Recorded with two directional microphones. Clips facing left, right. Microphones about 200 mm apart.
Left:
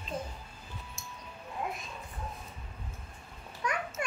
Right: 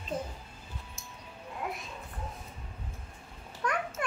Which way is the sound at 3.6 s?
55° right (ahead or behind).